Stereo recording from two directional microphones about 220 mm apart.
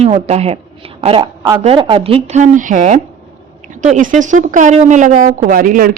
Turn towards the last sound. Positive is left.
turn(degrees=-40)  # may be behind; listen again after turning